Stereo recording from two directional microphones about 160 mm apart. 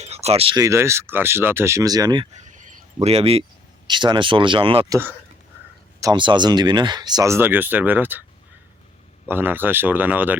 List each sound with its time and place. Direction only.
0.0 s a sound: 40° right (ahead or behind)
0.6 s speech: 15° right (ahead or behind)
2.3 s a sound: 50° right (ahead or behind)
3.8 s speech: 30° right (ahead or behind)
4.9 s speech: 15° right (ahead or behind)
6.0 s speech: 25° right (ahead or behind); by 8.2 s 10° right (ahead or behind)
9.3 s speech: 10° right (ahead or behind)